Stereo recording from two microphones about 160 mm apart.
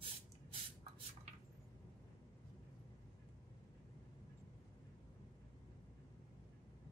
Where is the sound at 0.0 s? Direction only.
35° right (ahead or behind).